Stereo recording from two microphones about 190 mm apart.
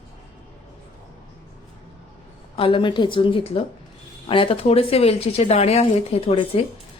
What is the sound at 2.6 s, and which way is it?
Speech, 30° left (ahead or behind).